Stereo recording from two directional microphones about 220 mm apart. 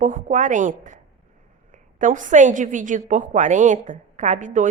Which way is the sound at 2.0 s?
35° right (ahead or behind).